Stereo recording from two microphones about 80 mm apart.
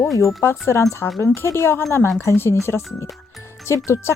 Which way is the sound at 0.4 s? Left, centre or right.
Left.